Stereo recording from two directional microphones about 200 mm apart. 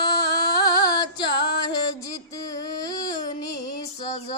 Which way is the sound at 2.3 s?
15° left (ahead or behind).